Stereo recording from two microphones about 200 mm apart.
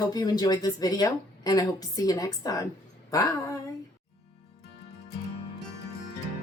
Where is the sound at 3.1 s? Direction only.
15° left (ahead or behind).